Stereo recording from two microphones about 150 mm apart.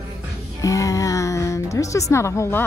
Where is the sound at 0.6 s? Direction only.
20° left (ahead or behind).